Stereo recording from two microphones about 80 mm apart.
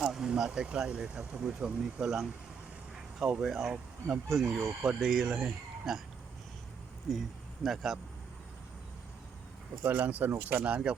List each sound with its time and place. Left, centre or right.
0.0 s speech: centre
7.6 s speech: centre
9.8 s speech: right